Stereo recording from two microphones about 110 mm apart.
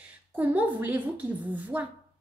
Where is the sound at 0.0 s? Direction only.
15° right (ahead or behind).